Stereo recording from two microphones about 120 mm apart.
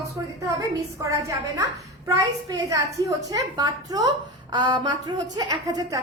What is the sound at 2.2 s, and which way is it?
A woman's voice, 30° right (ahead or behind).